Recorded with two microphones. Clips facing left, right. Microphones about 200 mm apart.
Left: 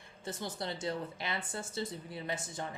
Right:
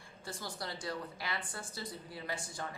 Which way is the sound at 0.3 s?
20° left (ahead or behind).